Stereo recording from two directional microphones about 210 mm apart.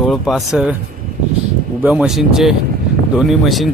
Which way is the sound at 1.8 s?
5° right (ahead or behind).